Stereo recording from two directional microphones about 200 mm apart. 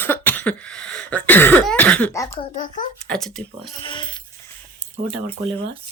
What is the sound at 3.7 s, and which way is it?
Speech, 25° left (ahead or behind).